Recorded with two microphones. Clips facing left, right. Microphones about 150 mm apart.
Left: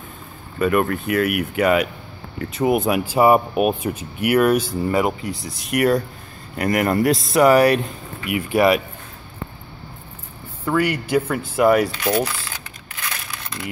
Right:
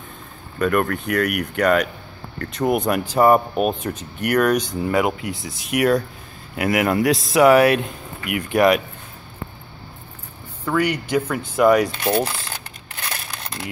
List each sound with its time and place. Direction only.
0.6 s speech: 5° left (ahead or behind)
10.6 s speech: 5° left (ahead or behind)
12.0 s a sound: 30° right (ahead or behind)